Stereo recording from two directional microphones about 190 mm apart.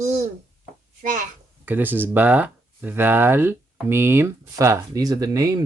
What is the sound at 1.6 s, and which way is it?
Speech, 10° right (ahead or behind).